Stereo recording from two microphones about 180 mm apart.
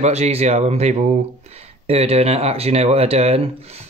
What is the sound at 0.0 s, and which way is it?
Speech, 35° right (ahead or behind).